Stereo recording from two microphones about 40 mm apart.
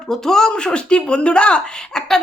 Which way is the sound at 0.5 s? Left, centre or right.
Left.